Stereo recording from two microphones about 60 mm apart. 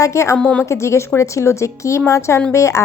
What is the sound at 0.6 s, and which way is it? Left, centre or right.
Speech, left.